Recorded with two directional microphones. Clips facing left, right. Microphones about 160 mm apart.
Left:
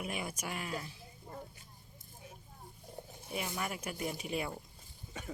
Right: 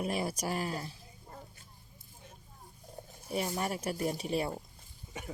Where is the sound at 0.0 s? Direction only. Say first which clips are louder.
Right 6 dB; 35° right (ahead or behind).